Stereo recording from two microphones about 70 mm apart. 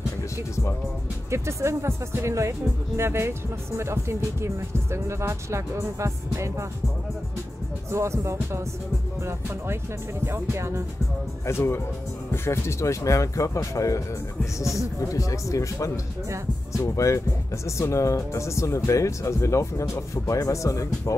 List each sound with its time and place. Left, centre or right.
1.3 s speech: right
7.9 s speech: right
10.2 s speech: right
11.4 s speech: left